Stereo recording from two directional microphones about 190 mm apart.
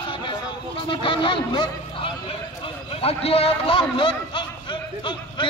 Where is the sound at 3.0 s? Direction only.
30° left (ahead or behind).